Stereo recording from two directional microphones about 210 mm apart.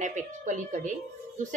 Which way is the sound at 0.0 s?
35° right (ahead or behind).